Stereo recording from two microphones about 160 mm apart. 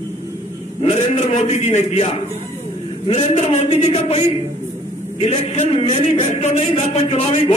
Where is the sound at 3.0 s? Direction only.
40° left (ahead or behind).